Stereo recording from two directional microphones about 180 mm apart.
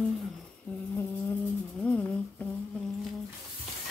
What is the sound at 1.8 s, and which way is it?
Humming, 5° left (ahead or behind).